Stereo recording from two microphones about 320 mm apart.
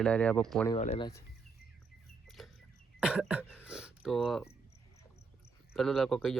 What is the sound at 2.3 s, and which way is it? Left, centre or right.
Mouse, centre.